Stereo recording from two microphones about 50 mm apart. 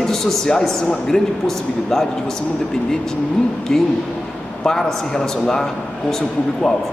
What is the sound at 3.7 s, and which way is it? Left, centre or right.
A man's voice, centre.